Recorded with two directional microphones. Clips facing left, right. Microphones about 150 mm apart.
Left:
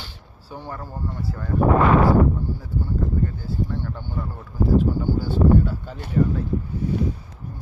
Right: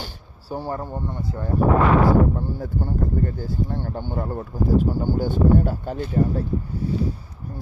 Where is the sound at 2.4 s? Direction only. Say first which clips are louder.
Right 2 dB; 55° right (ahead or behind).